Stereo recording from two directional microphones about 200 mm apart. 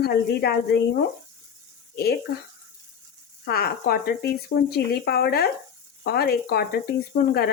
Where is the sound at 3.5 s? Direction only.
50° left (ahead or behind).